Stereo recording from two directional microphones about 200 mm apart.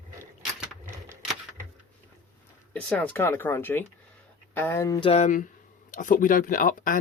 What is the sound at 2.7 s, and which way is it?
Speech, 5° left (ahead or behind).